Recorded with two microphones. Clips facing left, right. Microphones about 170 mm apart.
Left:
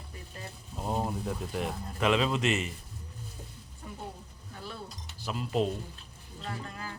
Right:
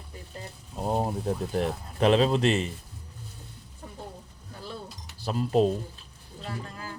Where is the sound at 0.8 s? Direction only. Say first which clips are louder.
Right 4 dB; 35° right (ahead or behind).